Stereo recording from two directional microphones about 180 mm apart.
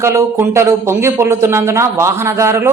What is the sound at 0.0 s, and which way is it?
A man's voice, 15° right (ahead or behind).